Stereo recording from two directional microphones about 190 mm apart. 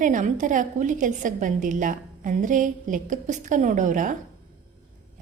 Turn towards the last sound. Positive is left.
turn(degrees=-45)  # may be behind; listen again after turning